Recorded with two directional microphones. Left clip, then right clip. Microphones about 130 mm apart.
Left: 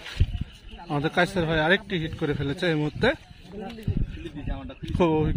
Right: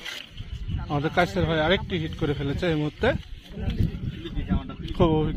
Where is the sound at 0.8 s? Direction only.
30° left (ahead or behind).